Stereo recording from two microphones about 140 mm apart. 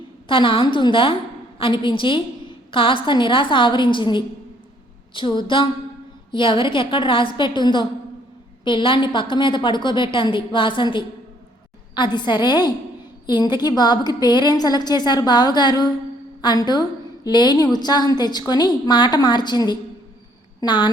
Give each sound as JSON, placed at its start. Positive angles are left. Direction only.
{"t": 0.3, "sound": "a woman's voice", "side_deg": 40}